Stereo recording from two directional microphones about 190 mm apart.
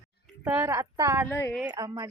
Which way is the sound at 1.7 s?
20° right (ahead or behind).